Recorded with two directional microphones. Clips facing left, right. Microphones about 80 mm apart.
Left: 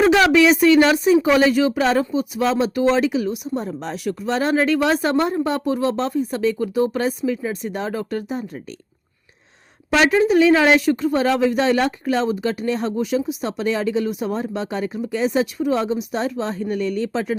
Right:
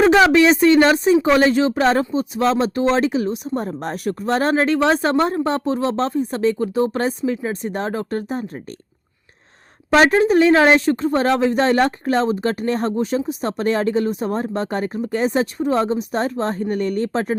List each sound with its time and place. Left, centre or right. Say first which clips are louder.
0.3 s speech: right 1 dB; right
3.8 s speech: right 2 dB; right
4.5 s speech: left 1 dB; right
9.9 s speech: right 2 dB; right